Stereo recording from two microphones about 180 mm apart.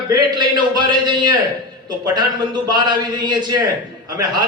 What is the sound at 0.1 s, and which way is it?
A man's voice, 25° right (ahead or behind).